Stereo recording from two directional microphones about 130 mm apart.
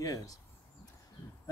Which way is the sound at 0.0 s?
25° left (ahead or behind).